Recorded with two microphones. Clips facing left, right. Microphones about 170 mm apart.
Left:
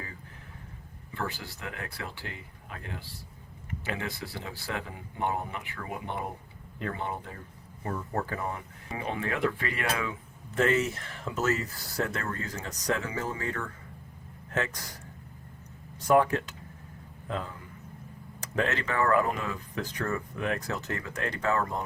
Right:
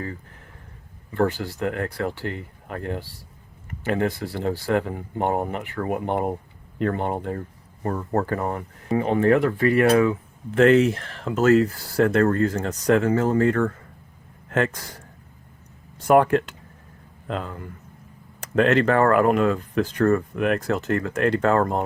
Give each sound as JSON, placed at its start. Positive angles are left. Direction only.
{"t": 1.1, "sound": "speech", "side_deg": -55}
{"t": 10.6, "sound": "speech", "side_deg": -65}
{"t": 13.1, "sound": "speech", "side_deg": -55}
{"t": 16.0, "sound": "speech", "side_deg": -60}
{"t": 17.2, "sound": "speech", "side_deg": -75}